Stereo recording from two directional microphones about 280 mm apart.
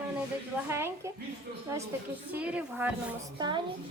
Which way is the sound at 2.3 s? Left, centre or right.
Centre.